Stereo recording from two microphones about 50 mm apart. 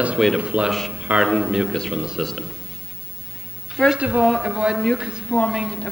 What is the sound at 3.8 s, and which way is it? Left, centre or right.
Speech, centre.